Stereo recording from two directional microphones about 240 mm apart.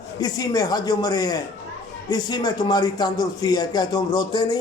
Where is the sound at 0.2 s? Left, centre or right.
Centre.